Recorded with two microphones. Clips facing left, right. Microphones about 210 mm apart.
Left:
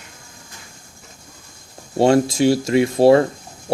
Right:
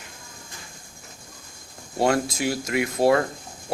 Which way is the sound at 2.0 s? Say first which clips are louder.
Left 8 dB; 30° left (ahead or behind).